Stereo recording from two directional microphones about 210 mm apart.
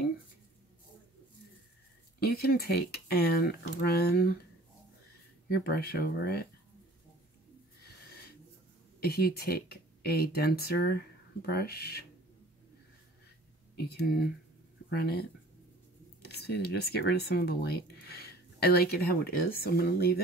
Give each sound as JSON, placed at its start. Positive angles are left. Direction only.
{"t": 2.1, "sound": "speech", "side_deg": 45}
{"t": 5.5, "sound": "speech", "side_deg": 50}
{"t": 9.0, "sound": "speech", "side_deg": 50}
{"t": 13.7, "sound": "speech", "side_deg": 50}